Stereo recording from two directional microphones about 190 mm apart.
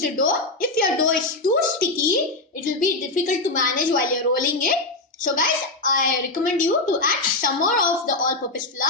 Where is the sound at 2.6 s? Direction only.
45° left (ahead or behind).